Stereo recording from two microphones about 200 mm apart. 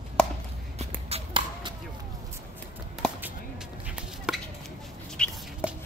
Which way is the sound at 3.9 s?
5° right (ahead or behind).